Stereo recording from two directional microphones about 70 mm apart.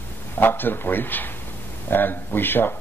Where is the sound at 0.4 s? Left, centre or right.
Left.